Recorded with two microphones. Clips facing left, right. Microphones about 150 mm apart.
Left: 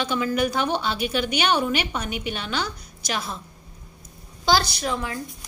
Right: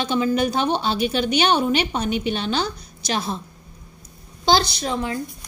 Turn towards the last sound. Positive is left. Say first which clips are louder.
# right 3 dB
turn(degrees=-25)  # may be behind; listen again after turning